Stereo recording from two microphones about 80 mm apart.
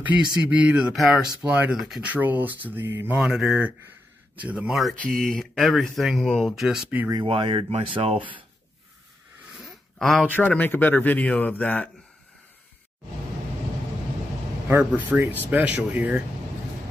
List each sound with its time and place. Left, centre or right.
0.0 s speech: centre
0.9 s speech: centre
2.0 s speech: centre
3.2 s speech: centre
4.4 s speech: centre
4.6 s speech: centre
4.9 s speech: centre
5.2 s speech: centre
7.3 s speech: right
9.5 s a sound: centre
10.2 s speech: centre
14.7 s speech: right